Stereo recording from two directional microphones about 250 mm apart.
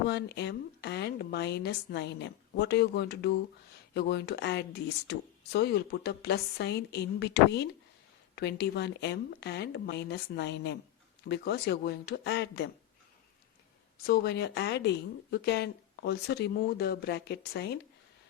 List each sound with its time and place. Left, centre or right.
0.1 s speech: left
14.1 s speech: left